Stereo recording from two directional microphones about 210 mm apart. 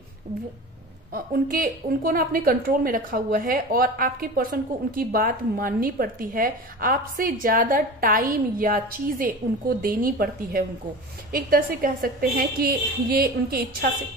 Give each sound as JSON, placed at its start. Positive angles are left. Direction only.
{"t": 1.1, "sound": "a woman's voice", "side_deg": -40}